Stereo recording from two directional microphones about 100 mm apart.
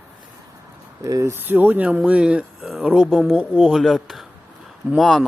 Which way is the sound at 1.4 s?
20° right (ahead or behind).